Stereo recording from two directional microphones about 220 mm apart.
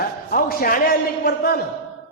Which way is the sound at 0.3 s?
40° left (ahead or behind).